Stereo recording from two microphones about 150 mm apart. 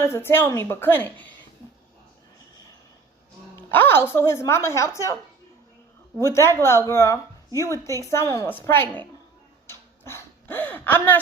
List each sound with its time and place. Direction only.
0.0 s speech: 15° left (ahead or behind)
3.7 s speech: 15° left (ahead or behind)
6.1 s a woman's voice: 20° left (ahead or behind)
9.6 s a sound: 15° left (ahead or behind)